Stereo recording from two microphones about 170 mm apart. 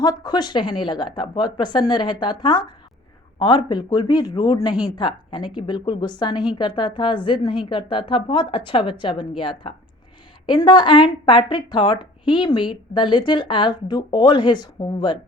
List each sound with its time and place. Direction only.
0.0 s speech: 25° left (ahead or behind)